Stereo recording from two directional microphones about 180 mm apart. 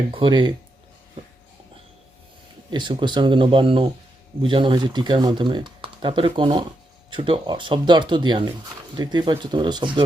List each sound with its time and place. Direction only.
0.1 s speech: 25° right (ahead or behind)
2.6 s speech: 25° right (ahead or behind)